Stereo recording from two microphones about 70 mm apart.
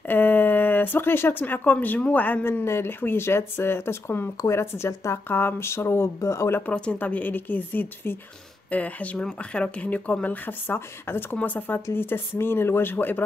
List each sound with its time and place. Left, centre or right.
0.1 s speech: left
2.6 s speech: left
6.6 s a woman's voice: centre